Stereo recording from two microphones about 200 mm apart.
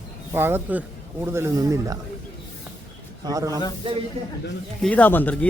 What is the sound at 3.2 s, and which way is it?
Speech, 15° right (ahead or behind).